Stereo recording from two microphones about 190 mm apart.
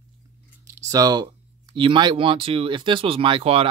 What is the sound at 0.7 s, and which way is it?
Speech, 15° right (ahead or behind).